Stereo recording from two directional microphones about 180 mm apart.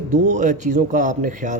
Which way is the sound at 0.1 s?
40° right (ahead or behind).